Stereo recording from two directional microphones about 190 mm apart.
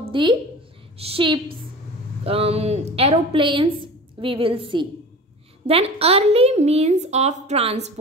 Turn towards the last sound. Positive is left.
turn(degrees=-35)  # may be behind; listen again after turning